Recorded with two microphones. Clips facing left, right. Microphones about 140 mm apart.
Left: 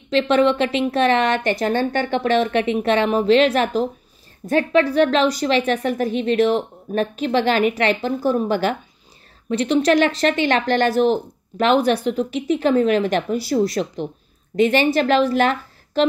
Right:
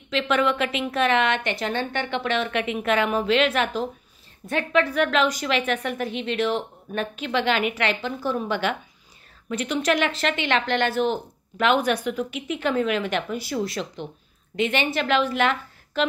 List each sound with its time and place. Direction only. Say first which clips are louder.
0.1 s a woman's voice: left 6 dB; 35° left (ahead or behind)